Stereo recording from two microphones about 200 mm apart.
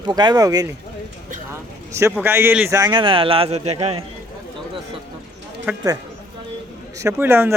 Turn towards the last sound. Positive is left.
turn(degrees=-10)  # may be behind; listen again after turning